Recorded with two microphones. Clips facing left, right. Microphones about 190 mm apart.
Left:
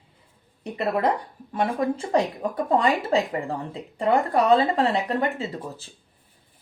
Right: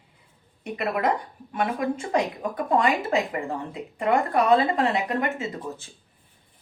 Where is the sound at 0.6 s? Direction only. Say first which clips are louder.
Left 2 dB; 35° left (ahead or behind).